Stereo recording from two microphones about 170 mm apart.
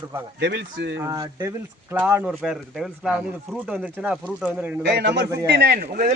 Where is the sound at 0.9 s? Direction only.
20° right (ahead or behind).